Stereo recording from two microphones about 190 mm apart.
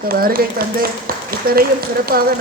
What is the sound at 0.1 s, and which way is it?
A man's voice, 50° right (ahead or behind).